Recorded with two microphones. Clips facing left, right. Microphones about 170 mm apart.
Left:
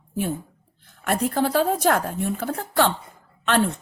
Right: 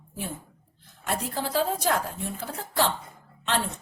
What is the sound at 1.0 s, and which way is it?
A woman's voice, 60° left (ahead or behind).